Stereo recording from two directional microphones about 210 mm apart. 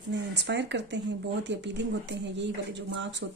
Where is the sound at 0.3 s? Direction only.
55° right (ahead or behind).